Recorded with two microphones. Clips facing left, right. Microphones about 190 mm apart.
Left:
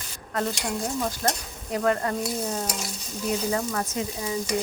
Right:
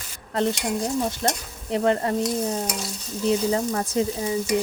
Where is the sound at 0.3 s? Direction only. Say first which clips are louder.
Right 4 dB; 20° right (ahead or behind).